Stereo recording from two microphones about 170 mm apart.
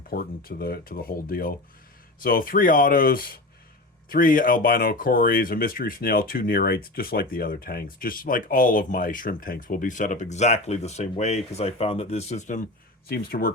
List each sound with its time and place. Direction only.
0.1 s speech: 60° left (ahead or behind); by 12.6 s 45° left (ahead or behind)
13.1 s speech: 65° left (ahead or behind)